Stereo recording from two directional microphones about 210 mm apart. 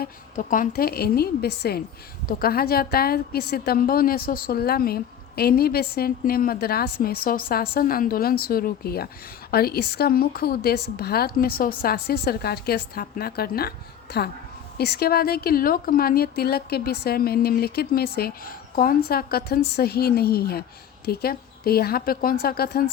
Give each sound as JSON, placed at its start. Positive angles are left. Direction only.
{"t": 0.0, "sound": "speech", "side_deg": 40}